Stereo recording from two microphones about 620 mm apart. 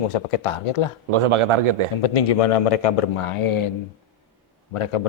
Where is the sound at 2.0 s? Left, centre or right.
Left.